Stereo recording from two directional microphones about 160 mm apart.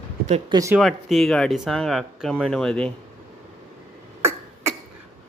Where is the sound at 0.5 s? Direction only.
20° right (ahead or behind).